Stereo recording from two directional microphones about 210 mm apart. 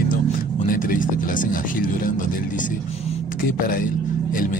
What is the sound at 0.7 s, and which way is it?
Speech, 40° left (ahead or behind).